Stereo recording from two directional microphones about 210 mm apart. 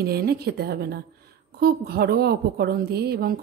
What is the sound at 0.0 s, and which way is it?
A woman's voice, 45° right (ahead or behind).